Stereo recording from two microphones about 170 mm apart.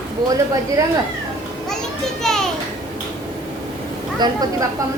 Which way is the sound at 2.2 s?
5° left (ahead or behind).